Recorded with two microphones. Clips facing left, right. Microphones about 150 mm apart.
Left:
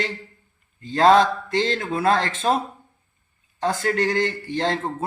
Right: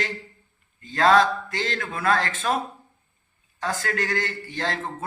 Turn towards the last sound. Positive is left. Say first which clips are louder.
# left 5 dB
turn(degrees=30)  # may be behind; listen again after turning